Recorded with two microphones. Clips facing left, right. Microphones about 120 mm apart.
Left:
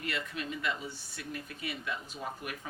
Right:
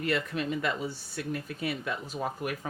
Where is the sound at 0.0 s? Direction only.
40° right (ahead or behind).